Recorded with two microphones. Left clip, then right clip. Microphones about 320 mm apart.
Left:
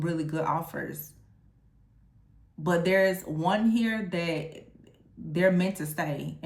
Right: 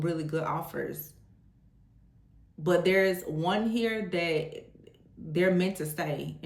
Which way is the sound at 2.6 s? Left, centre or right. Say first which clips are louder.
Left 1 dB; centre.